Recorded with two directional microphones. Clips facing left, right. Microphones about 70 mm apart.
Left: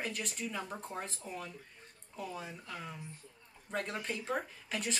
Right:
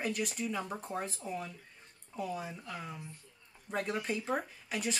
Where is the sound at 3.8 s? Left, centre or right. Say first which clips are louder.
Right 3 dB; centre.